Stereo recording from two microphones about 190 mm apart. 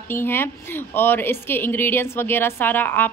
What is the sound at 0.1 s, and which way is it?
Speech, 10° left (ahead or behind).